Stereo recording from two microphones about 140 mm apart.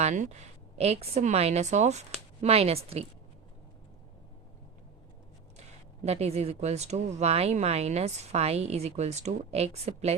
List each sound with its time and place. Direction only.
0.0 s a woman's voice: 60° right (ahead or behind)
6.1 s speech: 50° right (ahead or behind)